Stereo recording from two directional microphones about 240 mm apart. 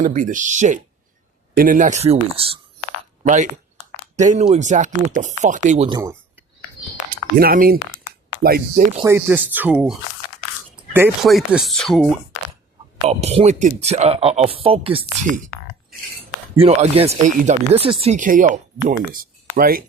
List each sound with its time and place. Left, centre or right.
0.0 s speech: right
7.1 s speech: right
9.0 s speech: centre
10.9 s speech: centre
12.3 s a sound: left
13.1 s speech: right
16.6 s speech: right